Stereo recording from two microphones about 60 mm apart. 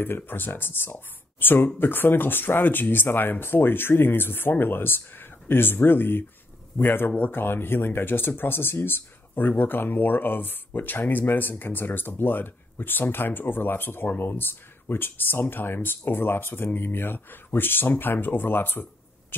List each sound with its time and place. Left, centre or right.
0.0 s speech: left